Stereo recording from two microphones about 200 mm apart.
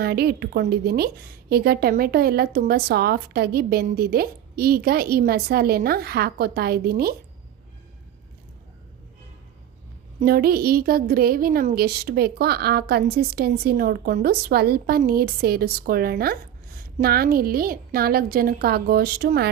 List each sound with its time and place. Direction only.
0.0 s a woman's voice: 50° right (ahead or behind)
10.2 s a woman's voice: 50° right (ahead or behind)